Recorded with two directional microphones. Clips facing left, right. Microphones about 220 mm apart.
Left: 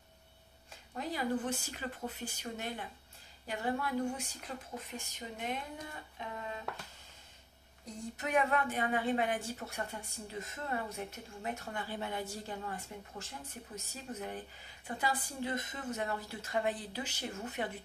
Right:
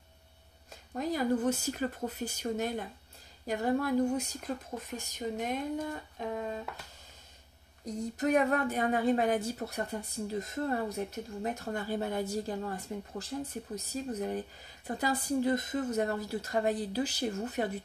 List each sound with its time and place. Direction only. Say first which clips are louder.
0.9 s speech: right 5 dB; 45° right (ahead or behind)
6.2 s a sound: right 8 dB; 45° right (ahead or behind)
7.8 s speech: right 9 dB; 40° right (ahead or behind)